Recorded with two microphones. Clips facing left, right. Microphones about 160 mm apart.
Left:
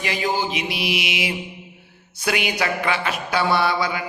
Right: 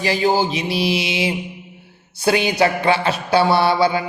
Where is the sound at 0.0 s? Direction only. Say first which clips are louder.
Right 6 dB; 35° right (ahead or behind).